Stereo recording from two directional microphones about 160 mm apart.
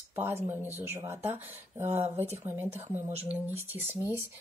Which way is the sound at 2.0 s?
40° right (ahead or behind).